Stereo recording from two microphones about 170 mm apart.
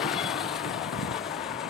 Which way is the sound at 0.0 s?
Centre (ahead or behind).